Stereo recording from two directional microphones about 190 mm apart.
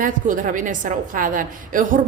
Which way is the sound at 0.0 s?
45° right (ahead or behind).